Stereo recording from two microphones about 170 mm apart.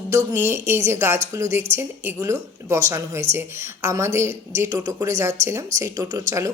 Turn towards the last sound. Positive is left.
turn(degrees=-20)  # may be behind; listen again after turning